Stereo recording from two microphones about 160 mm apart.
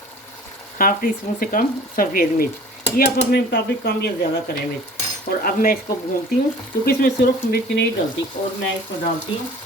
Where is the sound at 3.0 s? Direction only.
85° left.